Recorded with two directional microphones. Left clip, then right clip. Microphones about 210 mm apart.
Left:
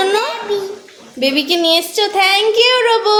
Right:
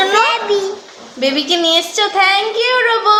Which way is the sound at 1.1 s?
20° left (ahead or behind).